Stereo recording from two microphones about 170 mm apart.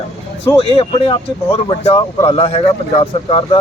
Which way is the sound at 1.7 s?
40° left (ahead or behind).